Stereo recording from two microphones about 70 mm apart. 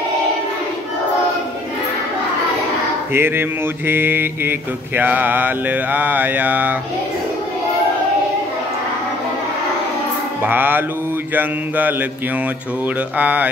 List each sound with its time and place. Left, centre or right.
3.1 s mantra: right
10.4 s mantra: right
13.2 s mantra: right